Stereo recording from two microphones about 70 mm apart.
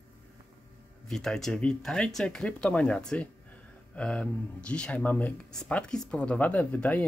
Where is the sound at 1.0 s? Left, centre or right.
Centre.